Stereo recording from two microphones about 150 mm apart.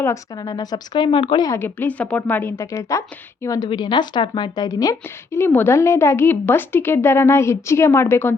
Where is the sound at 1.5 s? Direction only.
15° left (ahead or behind).